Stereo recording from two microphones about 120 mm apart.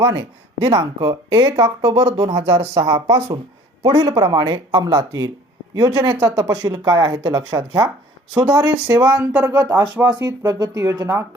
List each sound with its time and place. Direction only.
0.0 s speech: 35° right (ahead or behind)